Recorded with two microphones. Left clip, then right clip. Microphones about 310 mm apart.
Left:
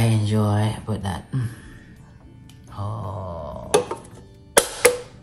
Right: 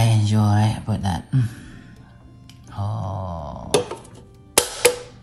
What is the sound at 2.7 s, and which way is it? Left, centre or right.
Music, right.